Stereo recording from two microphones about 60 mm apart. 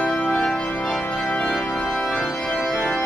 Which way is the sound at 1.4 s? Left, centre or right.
Centre.